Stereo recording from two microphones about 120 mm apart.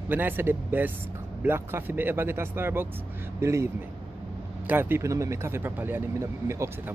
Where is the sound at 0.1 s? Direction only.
15° right (ahead or behind).